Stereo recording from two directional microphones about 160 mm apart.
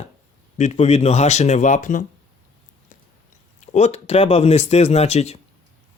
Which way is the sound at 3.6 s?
45° left (ahead or behind).